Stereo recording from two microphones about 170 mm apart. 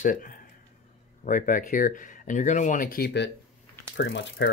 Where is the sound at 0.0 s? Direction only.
55° left (ahead or behind); by 3.3 s 80° left.